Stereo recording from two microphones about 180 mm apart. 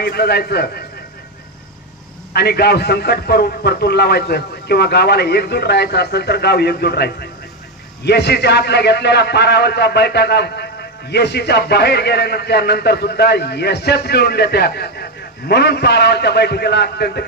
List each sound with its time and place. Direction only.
0.0 s a man's voice: 60° left (ahead or behind)
2.3 s a man's voice: 60° left (ahead or behind)